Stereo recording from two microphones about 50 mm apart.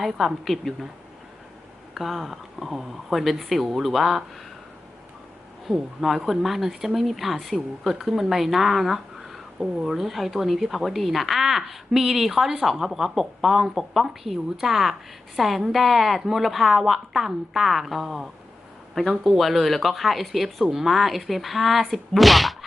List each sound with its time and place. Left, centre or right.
0.0 s speech: centre
2.0 s speech: centre
5.6 s speech: centre